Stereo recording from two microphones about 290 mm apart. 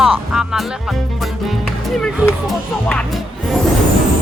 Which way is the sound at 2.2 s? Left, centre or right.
Centre.